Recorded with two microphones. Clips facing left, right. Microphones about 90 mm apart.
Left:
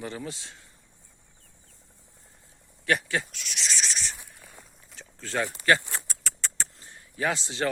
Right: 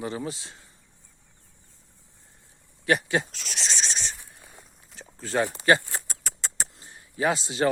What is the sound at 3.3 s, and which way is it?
Speech, 40° right (ahead or behind).